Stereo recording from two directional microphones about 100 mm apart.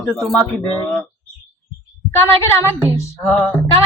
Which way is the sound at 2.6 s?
25° left (ahead or behind).